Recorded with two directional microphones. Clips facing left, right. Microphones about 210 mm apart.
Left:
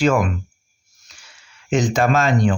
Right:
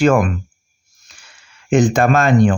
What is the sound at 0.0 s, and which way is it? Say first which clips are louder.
Speech: right 4 dB; 50° right (ahead or behind).